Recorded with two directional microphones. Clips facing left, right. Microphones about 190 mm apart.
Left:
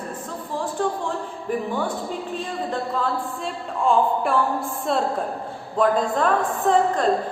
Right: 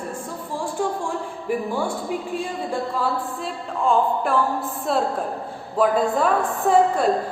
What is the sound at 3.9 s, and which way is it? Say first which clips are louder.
A woman's voice: even; centre (ahead or behind).